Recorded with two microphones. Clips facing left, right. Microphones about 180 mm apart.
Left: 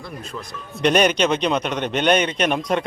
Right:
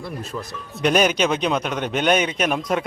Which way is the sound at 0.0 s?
5° right (ahead or behind).